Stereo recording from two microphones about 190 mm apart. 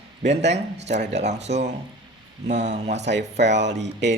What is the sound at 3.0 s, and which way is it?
Speech, 65° right (ahead or behind).